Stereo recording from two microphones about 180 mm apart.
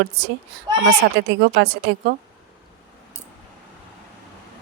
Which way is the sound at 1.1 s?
65° right (ahead or behind).